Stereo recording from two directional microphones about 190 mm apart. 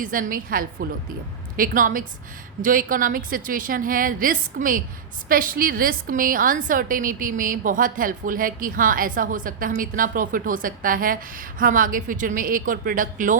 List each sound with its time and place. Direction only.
0.0 s a woman's voice: 45° right (ahead or behind)